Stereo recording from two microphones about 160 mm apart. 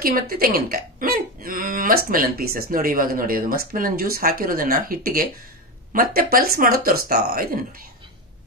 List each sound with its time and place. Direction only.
0.0 s speech: 65° right (ahead or behind)